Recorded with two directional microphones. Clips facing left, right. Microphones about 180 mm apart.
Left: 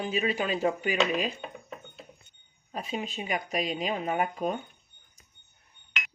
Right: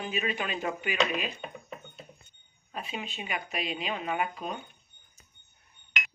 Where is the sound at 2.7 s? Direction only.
40° left (ahead or behind).